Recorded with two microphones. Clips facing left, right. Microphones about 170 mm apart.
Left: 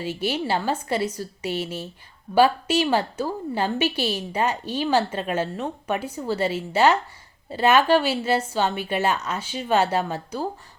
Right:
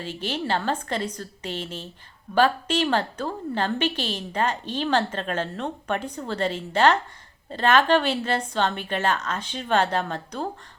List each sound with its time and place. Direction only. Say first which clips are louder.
0.0 s a woman's voice: left 3 dB; 10° left (ahead or behind)